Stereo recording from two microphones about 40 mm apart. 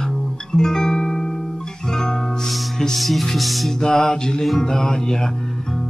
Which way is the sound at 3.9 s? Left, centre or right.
Centre.